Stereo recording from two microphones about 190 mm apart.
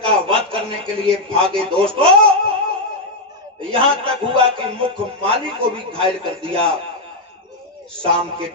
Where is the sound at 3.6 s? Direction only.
30° right (ahead or behind).